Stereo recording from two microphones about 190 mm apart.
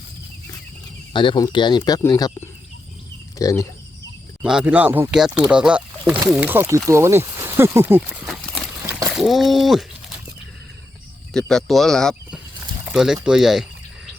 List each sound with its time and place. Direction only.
1.1 s speech: 25° left (ahead or behind)
4.4 s speech: 5° right (ahead or behind)
11.3 s speech: centre (ahead or behind)